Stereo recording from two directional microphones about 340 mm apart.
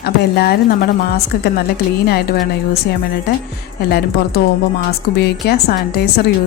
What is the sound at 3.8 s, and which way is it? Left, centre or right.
Speech, left.